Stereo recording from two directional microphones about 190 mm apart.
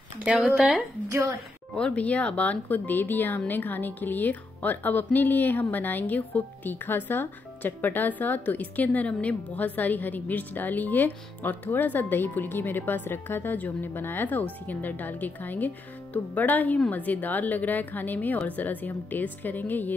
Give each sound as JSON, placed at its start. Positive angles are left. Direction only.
{"t": 0.2, "sound": "speech", "side_deg": -5}
{"t": 1.0, "sound": "a woman's voice", "side_deg": -15}
{"t": 1.8, "sound": "speech", "side_deg": 5}